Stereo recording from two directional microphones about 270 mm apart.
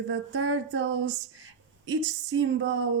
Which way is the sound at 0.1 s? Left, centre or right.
Right.